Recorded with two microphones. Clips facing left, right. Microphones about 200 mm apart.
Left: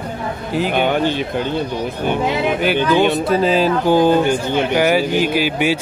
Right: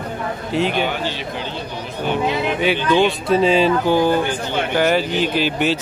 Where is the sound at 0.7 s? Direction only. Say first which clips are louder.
Left 5 dB; 55° left (ahead or behind).